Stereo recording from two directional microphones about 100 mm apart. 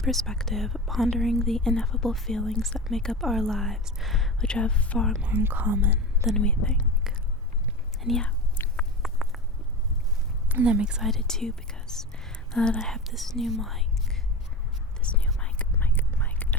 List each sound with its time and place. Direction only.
0.0 s speech: centre (ahead or behind)
5.2 s speech: 20° right (ahead or behind)
6.3 s speech: 10° left (ahead or behind)
8.0 s speech: 5° left (ahead or behind)
8.7 s a sound: 5° left (ahead or behind)
10.5 s speech: 10° right (ahead or behind)
15.0 s whispering: 10° left (ahead or behind)